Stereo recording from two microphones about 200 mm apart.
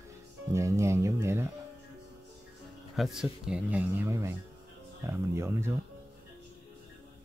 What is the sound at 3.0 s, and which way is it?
Speech, centre (ahead or behind).